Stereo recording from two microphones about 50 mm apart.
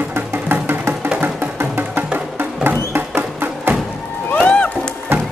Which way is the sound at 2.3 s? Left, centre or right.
Right.